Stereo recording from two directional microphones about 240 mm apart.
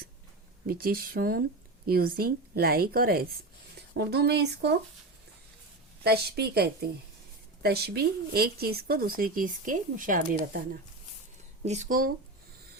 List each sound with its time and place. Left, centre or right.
0.7 s a woman's voice: right
6.0 s a woman's voice: right
11.6 s speech: right